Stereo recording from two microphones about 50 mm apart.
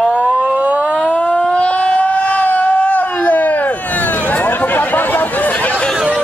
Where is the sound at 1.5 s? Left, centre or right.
Left.